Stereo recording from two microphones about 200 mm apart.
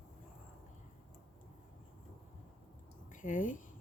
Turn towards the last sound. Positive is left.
turn(degrees=40)  # may be behind; listen again after turning